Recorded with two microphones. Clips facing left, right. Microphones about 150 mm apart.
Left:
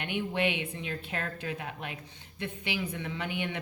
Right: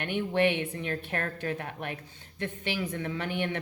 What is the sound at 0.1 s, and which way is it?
Speech, 15° left (ahead or behind).